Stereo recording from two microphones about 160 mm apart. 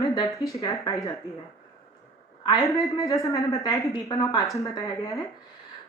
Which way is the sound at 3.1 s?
20° left (ahead or behind).